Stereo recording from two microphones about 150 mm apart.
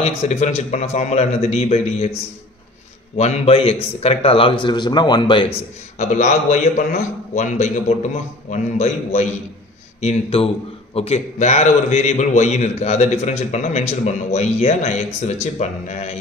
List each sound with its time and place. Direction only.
0.0 s a man's voice: 45° left (ahead or behind)
3.2 s a man's voice: 45° left (ahead or behind)
5.9 s a man's voice: 55° left (ahead or behind)